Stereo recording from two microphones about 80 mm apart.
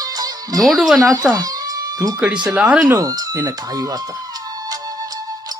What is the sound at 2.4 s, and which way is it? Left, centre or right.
Speech, centre.